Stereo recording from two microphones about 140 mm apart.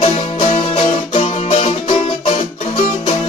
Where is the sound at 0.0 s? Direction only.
40° left (ahead or behind).